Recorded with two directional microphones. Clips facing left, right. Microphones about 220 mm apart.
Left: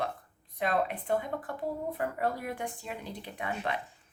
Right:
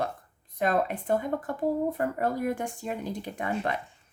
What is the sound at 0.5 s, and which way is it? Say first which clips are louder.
Speech: right 4 dB; 45° right (ahead or behind).